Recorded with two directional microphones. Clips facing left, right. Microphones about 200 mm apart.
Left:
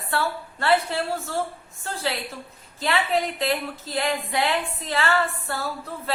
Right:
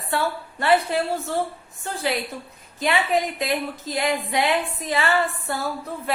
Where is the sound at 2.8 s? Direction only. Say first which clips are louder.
Right 2 dB; 15° right (ahead or behind).